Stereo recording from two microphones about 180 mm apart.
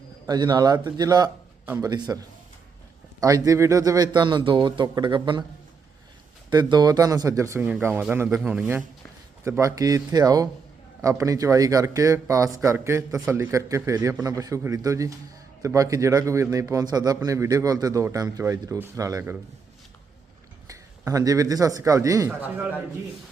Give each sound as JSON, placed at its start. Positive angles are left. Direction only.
{"t": 0.3, "sound": "a man's voice", "side_deg": -25}
{"t": 6.5, "sound": "a man's voice", "side_deg": -25}
{"t": 20.7, "sound": "a man's voice", "side_deg": -20}